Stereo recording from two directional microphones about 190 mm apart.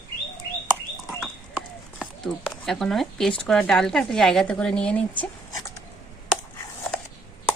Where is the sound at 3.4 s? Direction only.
Centre (ahead or behind).